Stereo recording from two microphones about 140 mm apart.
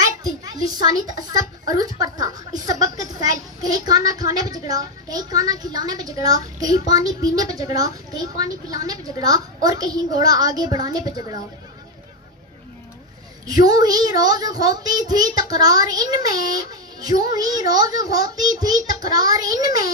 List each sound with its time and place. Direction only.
0.0 s a child's voice: 25° right (ahead or behind)
13.5 s a child's voice: 30° right (ahead or behind)